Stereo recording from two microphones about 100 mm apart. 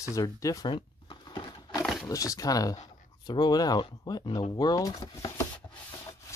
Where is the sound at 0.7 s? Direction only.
55° left (ahead or behind).